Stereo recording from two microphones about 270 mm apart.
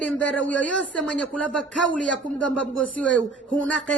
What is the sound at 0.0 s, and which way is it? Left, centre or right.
A man's voice, centre.